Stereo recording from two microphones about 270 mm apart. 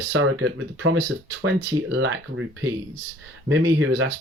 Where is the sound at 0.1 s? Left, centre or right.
Right.